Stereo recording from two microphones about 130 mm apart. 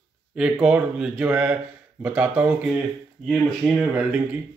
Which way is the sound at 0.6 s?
10° right (ahead or behind).